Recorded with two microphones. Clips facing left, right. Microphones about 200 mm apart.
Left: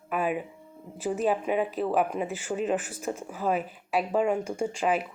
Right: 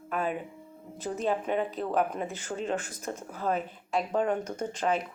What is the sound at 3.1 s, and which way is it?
Speech, centre (ahead or behind).